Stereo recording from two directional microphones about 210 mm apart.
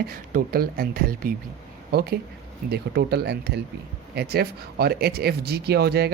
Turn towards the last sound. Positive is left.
turn(degrees=-50)  # may be behind; listen again after turning